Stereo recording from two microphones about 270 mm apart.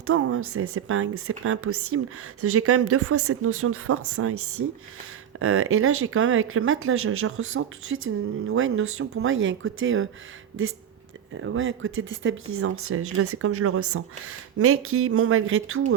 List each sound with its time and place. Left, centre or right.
0.1 s a woman's voice: right